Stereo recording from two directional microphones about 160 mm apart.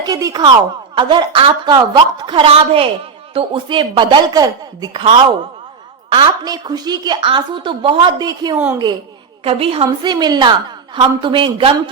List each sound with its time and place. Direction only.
0.0 s a woman's voice: 20° right (ahead or behind)
6.1 s a woman's voice: 30° right (ahead or behind)
9.4 s a woman's voice: 35° right (ahead or behind)